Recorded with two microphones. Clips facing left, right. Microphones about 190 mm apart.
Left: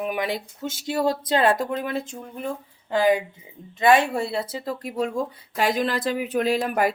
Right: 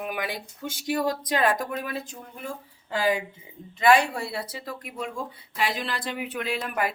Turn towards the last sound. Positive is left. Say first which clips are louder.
# left 7 dB
turn(degrees=40)  # may be behind; listen again after turning